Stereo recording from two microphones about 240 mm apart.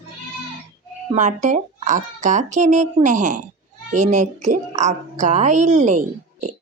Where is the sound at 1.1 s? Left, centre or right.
Right.